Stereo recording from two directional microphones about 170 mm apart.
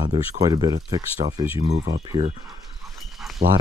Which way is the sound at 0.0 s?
25° right (ahead or behind).